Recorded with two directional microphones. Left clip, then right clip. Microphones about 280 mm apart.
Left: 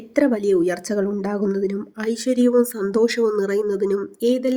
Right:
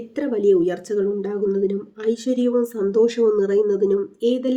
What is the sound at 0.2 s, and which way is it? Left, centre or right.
Speech, left.